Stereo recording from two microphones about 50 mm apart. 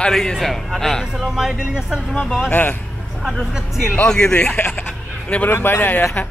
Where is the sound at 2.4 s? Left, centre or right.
Left.